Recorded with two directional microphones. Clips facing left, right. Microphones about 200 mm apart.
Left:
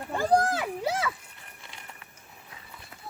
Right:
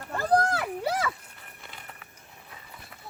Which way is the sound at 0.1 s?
5° left (ahead or behind).